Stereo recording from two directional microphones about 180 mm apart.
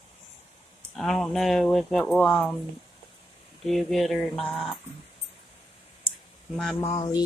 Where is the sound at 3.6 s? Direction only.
Centre (ahead or behind).